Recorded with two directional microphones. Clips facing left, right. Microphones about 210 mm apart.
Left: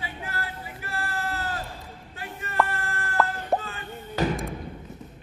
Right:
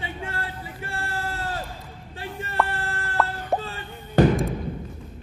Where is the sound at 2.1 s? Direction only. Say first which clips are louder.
Even; 30° right (ahead or behind).